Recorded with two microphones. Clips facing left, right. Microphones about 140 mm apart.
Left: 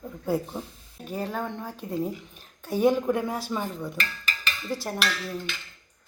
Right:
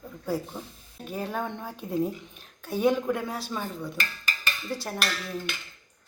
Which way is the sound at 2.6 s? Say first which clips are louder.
Left 2 dB; 15° left (ahead or behind).